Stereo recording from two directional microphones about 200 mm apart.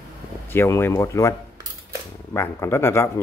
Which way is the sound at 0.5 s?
10° left (ahead or behind).